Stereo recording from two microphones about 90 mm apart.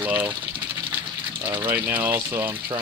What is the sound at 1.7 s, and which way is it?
Speech, 20° right (ahead or behind).